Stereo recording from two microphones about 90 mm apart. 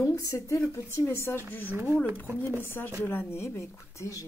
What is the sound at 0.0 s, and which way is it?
A woman's voice, 35° left (ahead or behind).